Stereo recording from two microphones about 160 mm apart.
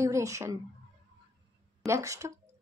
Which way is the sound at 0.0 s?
20° right (ahead or behind).